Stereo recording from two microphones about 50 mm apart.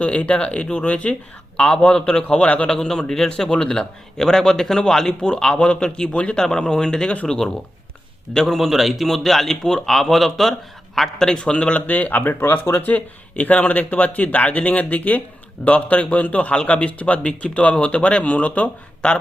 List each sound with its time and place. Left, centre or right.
0.0 s a man's voice: left
2.6 s a man's voice: centre
8.5 s a man's voice: centre; by 12.4 s left
12.4 s speech: left
12.8 s a man's voice: left